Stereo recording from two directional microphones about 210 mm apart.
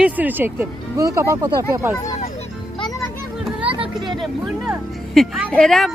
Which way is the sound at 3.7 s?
25° right (ahead or behind).